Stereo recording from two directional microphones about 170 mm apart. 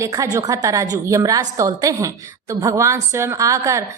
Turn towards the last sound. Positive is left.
turn(degrees=-20)  # may be behind; listen again after turning